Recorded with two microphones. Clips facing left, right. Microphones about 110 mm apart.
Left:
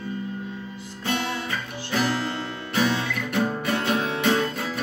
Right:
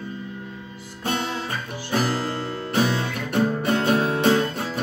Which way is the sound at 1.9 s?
40° right (ahead or behind).